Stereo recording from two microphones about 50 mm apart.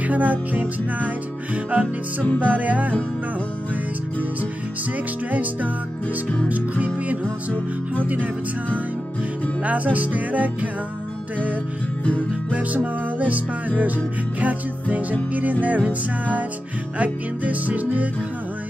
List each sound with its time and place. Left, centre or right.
0.0 s music: right
5.3 s music: right
9.6 s music: right
12.0 s music: left
12.5 s music: right